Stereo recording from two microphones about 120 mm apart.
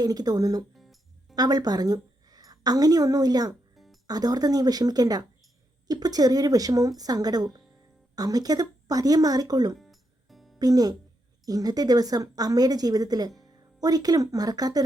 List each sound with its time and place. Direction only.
0.0 s a woman's voice: 35° right (ahead or behind)
0.8 s music: centre (ahead or behind)
1.4 s a woman's voice: 35° right (ahead or behind)
9.7 s music: centre (ahead or behind)
10.6 s a woman's voice: 30° right (ahead or behind)